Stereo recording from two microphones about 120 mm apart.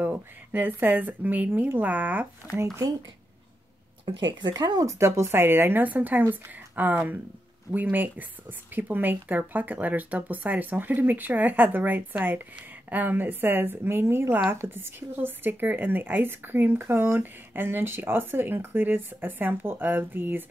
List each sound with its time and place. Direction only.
0.0 s a woman's voice: 15° right (ahead or behind)
2.5 s speech: 25° right (ahead or behind)
4.2 s a woman's voice: 40° right (ahead or behind); by 20.4 s 15° right (ahead or behind)